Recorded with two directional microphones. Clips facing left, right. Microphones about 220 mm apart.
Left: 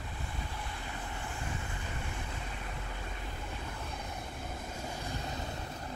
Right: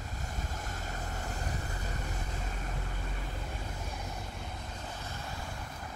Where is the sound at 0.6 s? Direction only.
45° right (ahead or behind).